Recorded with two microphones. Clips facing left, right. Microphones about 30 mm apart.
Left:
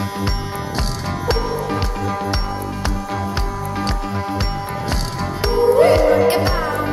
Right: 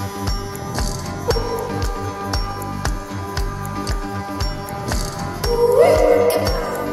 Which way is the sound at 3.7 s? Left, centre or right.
Left.